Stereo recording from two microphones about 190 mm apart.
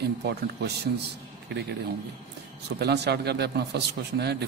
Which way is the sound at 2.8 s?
60° right (ahead or behind).